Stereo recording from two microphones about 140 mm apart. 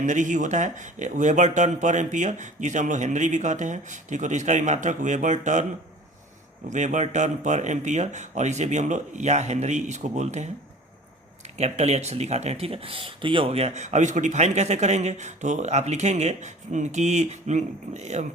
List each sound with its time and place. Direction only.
0.0 s speech: 60° right (ahead or behind)
6.7 s speech: 60° right (ahead or behind)
11.5 s speech: 55° right (ahead or behind)